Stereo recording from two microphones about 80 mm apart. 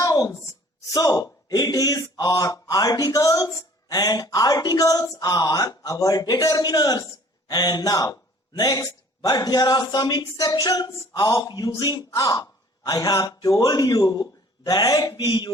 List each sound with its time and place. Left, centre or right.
0.0 s a sound: left
0.9 s a man's voice: left
10.3 s speech: left